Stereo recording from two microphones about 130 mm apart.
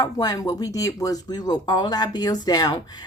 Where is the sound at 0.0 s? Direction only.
30° left (ahead or behind).